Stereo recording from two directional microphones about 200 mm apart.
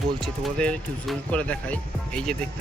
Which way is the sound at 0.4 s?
5° left (ahead or behind).